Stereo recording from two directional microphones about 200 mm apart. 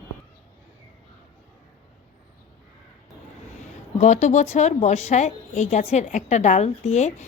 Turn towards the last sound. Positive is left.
turn(degrees=35)  # may be behind; listen again after turning